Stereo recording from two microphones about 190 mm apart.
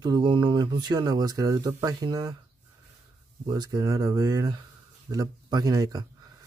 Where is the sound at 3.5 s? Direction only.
20° right (ahead or behind).